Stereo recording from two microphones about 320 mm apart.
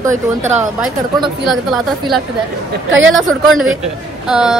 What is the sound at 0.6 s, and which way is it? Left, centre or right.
A man's voice, centre.